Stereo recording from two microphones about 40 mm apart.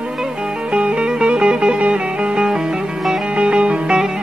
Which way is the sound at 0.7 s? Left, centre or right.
Right.